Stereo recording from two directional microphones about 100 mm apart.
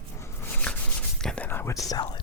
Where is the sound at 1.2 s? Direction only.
5° left (ahead or behind).